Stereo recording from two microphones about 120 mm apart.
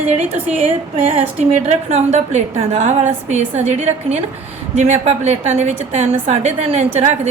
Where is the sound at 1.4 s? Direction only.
70° right (ahead or behind).